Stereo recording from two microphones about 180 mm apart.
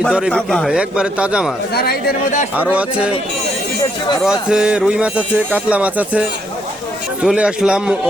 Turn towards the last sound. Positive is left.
turn(degrees=-5)  # may be behind; listen again after turning